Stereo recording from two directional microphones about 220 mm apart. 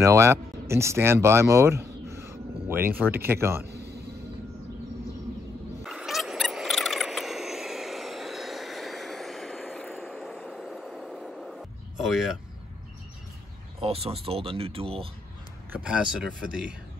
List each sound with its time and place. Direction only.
0.0 s speech: 15° right (ahead or behind)
3.6 s music: 45° right (ahead or behind)
5.9 s a sound: centre (ahead or behind)
13.7 s speech: 25° right (ahead or behind)
15.7 s speech: 5° right (ahead or behind)